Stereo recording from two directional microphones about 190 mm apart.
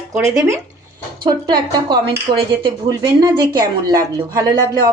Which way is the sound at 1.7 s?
20° right (ahead or behind).